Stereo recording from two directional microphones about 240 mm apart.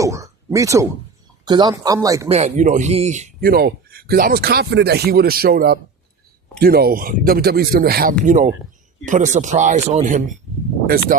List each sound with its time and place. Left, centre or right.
0.0 s speech: centre
2.3 s speech: right